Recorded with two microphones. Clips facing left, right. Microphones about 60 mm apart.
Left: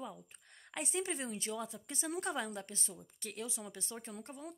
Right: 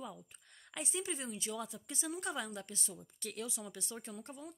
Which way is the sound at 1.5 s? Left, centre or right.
Left.